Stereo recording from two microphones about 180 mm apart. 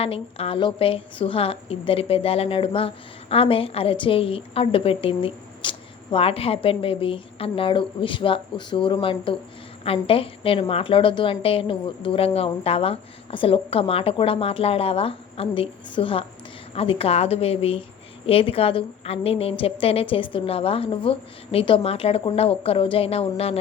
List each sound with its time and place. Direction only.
0.0 s a woman's voice: 30° left (ahead or behind)